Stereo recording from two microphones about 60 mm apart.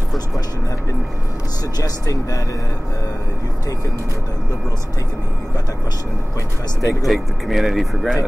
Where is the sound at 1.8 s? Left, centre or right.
Left.